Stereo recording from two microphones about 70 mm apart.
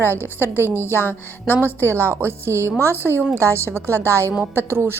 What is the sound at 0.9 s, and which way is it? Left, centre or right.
Speech, left.